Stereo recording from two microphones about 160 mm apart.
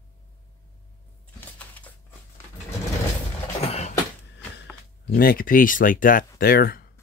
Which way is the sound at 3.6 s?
45° left (ahead or behind).